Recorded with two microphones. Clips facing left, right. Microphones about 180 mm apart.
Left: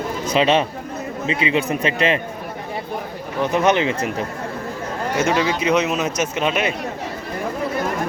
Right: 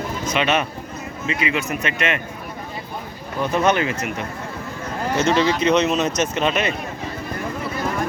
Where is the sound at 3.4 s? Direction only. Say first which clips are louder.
Left 2 dB; 20° left (ahead or behind).